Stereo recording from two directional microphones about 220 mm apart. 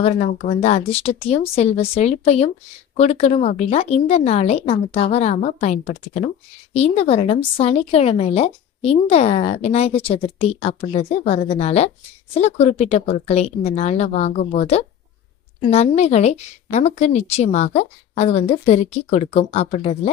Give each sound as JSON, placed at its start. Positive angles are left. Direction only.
{"t": 0.0, "sound": "a woman's voice", "side_deg": 30}